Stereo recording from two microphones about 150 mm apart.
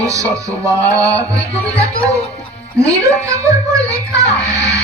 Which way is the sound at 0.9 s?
20° right (ahead or behind).